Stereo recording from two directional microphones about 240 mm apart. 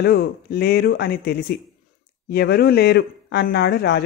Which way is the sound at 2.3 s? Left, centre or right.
Left.